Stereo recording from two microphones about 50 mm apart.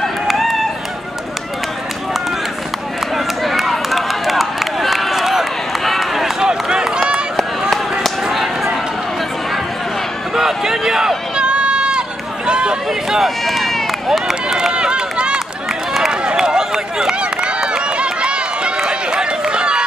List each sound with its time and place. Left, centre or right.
0.0 s run: centre
3.4 s run: centre
6.4 s run: centre
8.3 s a sound: centre
10.3 s run: centre
12.4 s a sound: centre
13.2 s run: centre
14.7 s run: centre